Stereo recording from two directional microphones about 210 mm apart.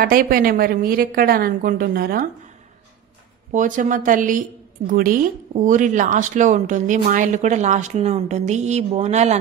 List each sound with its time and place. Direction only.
0.0 s a woman's voice: 45° right (ahead or behind)
3.5 s speech: 35° right (ahead or behind)